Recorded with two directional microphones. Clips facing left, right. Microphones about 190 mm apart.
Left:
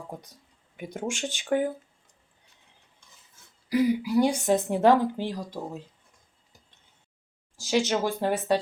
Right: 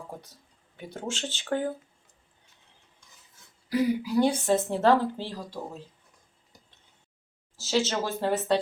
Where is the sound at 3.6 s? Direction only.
10° left (ahead or behind).